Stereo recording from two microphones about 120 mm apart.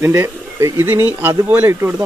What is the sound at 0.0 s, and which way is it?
Speech, 20° right (ahead or behind).